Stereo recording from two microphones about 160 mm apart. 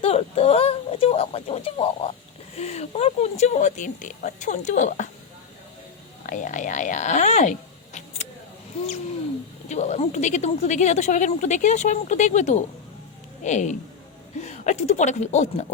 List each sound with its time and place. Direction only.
0.0 s speech: 40° left (ahead or behind)
6.2 s speech: 50° left (ahead or behind)
9.6 s speech: 45° left (ahead or behind)